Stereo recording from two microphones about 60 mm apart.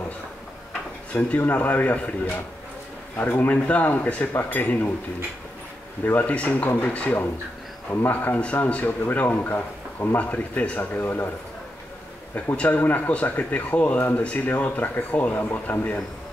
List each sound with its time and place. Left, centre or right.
1.1 s speech: left
3.2 s speech: left
6.0 s speech: left
12.5 s speech: left